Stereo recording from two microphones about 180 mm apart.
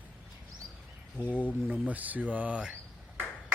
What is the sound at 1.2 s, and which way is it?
Speech, 10° right (ahead or behind).